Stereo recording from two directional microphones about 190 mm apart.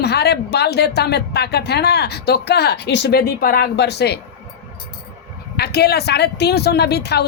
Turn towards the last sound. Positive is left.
turn(degrees=60)  # may be behind; listen again after turning